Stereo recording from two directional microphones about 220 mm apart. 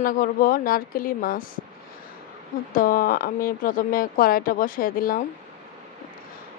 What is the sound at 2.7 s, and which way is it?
Speech, 40° left (ahead or behind).